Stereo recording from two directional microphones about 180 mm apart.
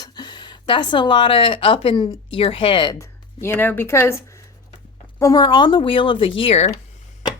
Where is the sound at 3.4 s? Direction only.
10° left (ahead or behind); by 6.7 s 30° left (ahead or behind).